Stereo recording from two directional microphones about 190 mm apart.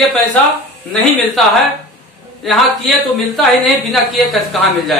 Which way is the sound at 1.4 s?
Centre (ahead or behind).